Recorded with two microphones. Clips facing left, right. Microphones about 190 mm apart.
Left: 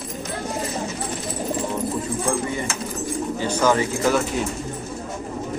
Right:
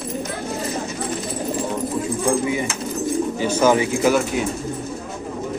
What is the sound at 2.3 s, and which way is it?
Bird, 10° right (ahead or behind).